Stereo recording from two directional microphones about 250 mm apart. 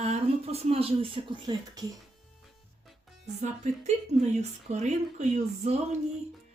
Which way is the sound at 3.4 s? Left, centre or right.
Right.